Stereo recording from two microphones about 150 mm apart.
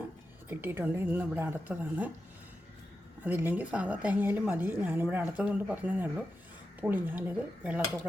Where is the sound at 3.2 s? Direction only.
10° right (ahead or behind).